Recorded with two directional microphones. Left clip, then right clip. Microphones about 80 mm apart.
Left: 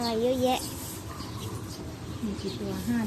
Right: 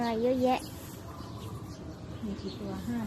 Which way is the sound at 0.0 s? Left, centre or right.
Right.